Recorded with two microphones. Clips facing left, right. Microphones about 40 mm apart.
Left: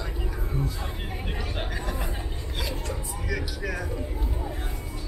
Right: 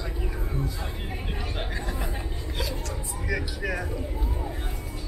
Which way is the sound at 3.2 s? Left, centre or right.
Centre.